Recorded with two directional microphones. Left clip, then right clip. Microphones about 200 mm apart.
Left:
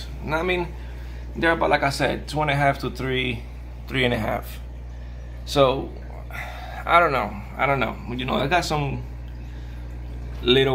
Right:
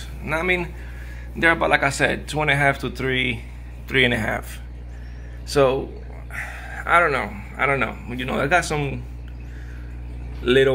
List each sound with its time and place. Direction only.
0.2 s speech: 10° right (ahead or behind); by 8.5 s 10° left (ahead or behind)
8.5 s speech: centre (ahead or behind)
10.4 s speech: 15° left (ahead or behind)